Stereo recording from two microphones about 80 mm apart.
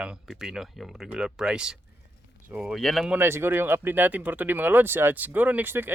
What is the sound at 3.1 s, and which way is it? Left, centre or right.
Speech, right.